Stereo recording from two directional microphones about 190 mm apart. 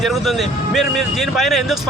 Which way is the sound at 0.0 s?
Centre (ahead or behind).